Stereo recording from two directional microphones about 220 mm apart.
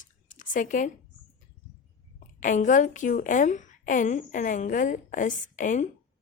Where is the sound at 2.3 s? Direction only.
35° left (ahead or behind).